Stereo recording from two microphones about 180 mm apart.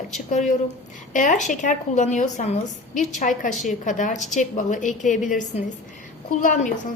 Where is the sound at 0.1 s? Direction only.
40° left (ahead or behind).